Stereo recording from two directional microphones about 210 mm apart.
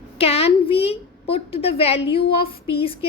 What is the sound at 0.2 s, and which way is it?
A woman's voice, 30° left (ahead or behind).